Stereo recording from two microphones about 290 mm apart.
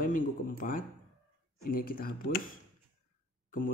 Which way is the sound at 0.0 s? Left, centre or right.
Left.